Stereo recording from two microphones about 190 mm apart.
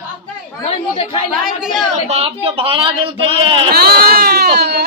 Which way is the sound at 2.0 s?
30° right (ahead or behind).